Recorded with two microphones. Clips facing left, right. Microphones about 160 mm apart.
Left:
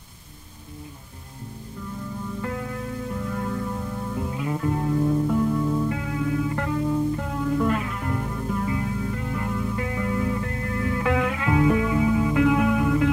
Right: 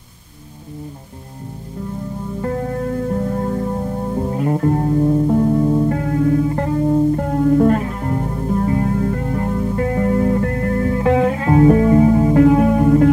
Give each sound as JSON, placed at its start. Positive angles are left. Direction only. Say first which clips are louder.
{"t": 2.4, "sound": "music", "louder": "right 12 dB", "side_deg": -40}